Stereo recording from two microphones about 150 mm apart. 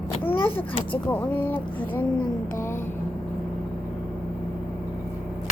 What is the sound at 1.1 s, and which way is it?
Speech, 10° left (ahead or behind).